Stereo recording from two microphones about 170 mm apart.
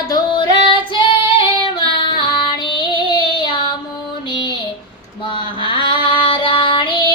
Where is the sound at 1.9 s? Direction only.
30° left (ahead or behind).